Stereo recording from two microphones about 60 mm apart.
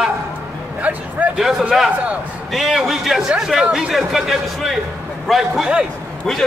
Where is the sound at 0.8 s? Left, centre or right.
Right.